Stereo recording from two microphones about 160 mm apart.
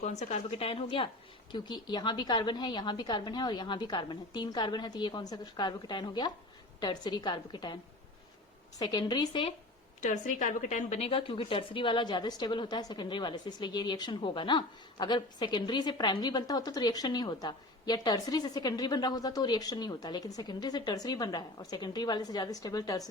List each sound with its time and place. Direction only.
0.0 s a woman's voice: 45° left (ahead or behind); by 7.8 s 25° left (ahead or behind)
8.8 s a woman's voice: 25° left (ahead or behind)
10.0 s a woman's voice: 55° left (ahead or behind); by 23.0 s 20° left (ahead or behind)